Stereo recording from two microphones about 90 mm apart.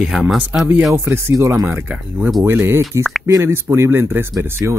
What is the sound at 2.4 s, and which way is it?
Speech, 25° right (ahead or behind).